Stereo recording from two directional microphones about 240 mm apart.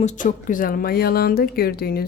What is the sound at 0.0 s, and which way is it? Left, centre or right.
Speech, left.